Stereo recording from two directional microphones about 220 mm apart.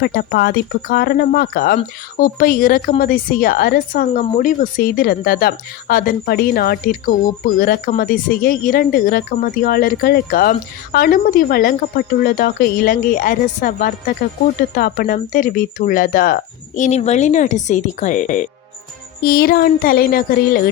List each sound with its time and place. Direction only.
0.0 s speech: 45° left (ahead or behind)